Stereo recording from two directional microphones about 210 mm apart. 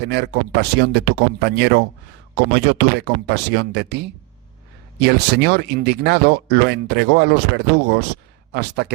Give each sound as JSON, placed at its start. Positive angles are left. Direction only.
{"t": 0.0, "sound": "speech", "side_deg": -55}
{"t": 4.9, "sound": "speech", "side_deg": -55}